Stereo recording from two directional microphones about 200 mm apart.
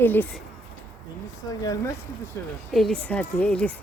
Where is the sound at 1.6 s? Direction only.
20° left (ahead or behind).